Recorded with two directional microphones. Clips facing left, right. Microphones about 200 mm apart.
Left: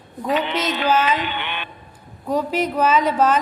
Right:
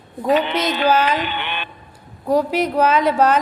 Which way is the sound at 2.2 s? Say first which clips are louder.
Right 3 dB; 10° right (ahead or behind).